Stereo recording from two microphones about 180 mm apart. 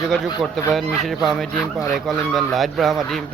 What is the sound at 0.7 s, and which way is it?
A man's voice, centre (ahead or behind).